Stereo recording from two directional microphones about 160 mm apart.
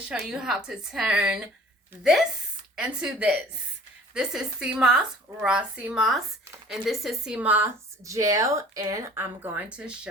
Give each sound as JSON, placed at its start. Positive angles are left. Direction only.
{"t": 0.0, "sound": "a woman's voice", "side_deg": -5}
{"t": 2.7, "sound": "a woman's voice", "side_deg": -5}